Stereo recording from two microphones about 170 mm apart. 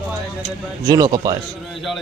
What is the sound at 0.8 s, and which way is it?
Speech, 20° right (ahead or behind).